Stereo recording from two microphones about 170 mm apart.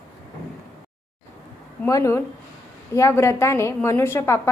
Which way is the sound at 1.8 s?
15° left (ahead or behind).